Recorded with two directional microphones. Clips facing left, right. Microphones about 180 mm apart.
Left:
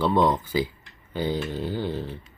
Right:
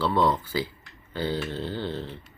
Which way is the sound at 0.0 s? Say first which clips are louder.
Left 2 dB; 20° left (ahead or behind).